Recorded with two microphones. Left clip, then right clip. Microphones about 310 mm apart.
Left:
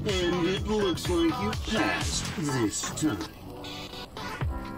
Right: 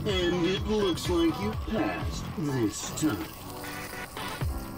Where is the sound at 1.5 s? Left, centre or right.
Left.